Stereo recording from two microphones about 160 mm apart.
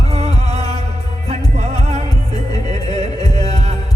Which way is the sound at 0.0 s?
40° right (ahead or behind).